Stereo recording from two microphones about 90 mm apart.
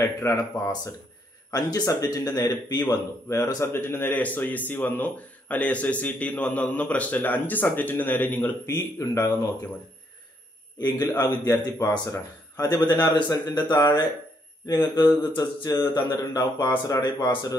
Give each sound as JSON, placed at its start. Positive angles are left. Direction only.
{"t": 0.0, "sound": "speech", "side_deg": 35}
{"t": 3.3, "sound": "speech", "side_deg": 35}
{"t": 8.6, "sound": "speech", "side_deg": 40}
{"t": 10.8, "sound": "speech", "side_deg": 45}
{"t": 12.5, "sound": "speech", "side_deg": 50}